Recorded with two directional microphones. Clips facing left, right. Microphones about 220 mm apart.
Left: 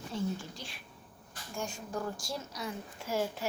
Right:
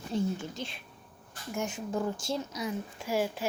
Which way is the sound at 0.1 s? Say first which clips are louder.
Right 5 dB; 25° right (ahead or behind).